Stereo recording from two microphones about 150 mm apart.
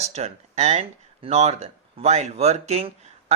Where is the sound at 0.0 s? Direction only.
45° right (ahead or behind).